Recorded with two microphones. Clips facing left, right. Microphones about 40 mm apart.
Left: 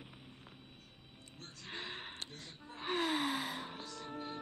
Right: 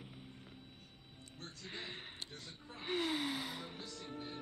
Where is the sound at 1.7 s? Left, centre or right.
Left.